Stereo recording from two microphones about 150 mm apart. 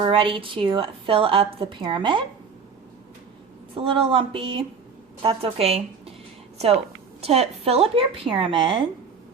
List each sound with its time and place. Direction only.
0.0 s a woman's voice: 35° right (ahead or behind)
3.8 s a woman's voice: 35° right (ahead or behind)
7.2 s a woman's voice: 40° right (ahead or behind)